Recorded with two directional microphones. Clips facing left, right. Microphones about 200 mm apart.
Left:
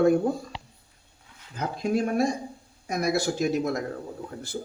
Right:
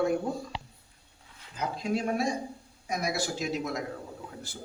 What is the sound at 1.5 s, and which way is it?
Speech, 55° left (ahead or behind).